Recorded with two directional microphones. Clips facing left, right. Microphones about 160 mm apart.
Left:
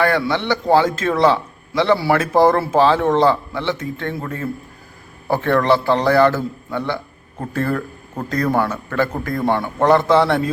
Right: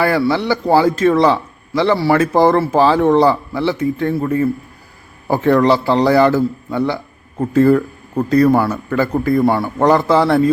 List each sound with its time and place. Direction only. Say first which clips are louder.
0.0 s a man's voice: right 3 dB; 5° right (ahead or behind)